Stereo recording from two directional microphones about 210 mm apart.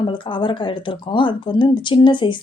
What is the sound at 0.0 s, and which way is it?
Speech, 25° left (ahead or behind).